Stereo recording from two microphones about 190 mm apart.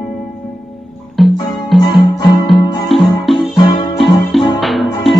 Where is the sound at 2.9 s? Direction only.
Centre (ahead or behind).